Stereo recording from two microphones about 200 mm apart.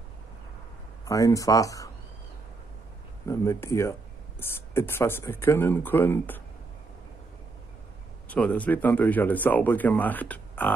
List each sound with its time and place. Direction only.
1.0 s speech: 15° left (ahead or behind)
3.3 s speech: 15° left (ahead or behind)
8.3 s speech: 5° left (ahead or behind)